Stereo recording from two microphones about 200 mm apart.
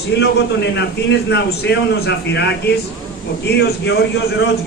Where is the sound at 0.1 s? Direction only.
60° left (ahead or behind).